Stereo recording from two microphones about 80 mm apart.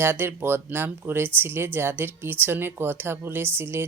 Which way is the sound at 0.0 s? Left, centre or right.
Right.